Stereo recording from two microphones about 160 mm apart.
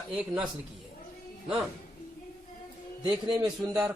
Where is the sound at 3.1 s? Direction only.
5° right (ahead or behind).